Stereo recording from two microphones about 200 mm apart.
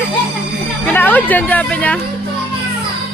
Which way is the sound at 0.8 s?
10° left (ahead or behind).